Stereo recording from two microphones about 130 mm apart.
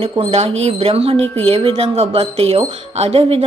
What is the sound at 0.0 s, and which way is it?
Music, 50° right (ahead or behind).